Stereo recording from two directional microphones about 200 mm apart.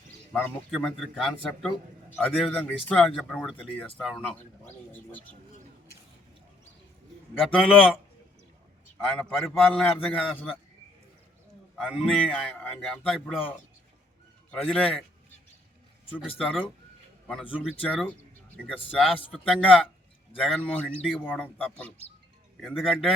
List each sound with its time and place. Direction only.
0.3 s speech: 5° left (ahead or behind)
7.3 s speech: 5° left (ahead or behind)
9.0 s speech: 5° left (ahead or behind)
11.8 s speech: 5° left (ahead or behind)
14.5 s speech: 5° left (ahead or behind)
16.4 s speech: 5° left (ahead or behind)
17.8 s speech: 5° left (ahead or behind)